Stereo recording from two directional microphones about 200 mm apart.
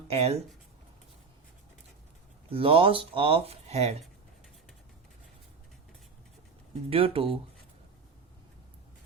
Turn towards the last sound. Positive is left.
turn(degrees=-25)  # may be behind; listen again after turning